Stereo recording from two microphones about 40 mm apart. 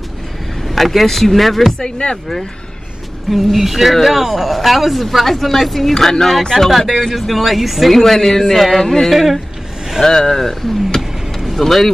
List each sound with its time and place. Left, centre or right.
0.7 s speech: centre
1.8 s speech: left
3.5 s speech: centre
11.0 s vehicle: centre